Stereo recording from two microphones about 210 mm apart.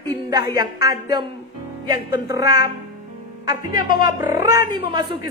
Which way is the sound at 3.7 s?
45° left (ahead or behind).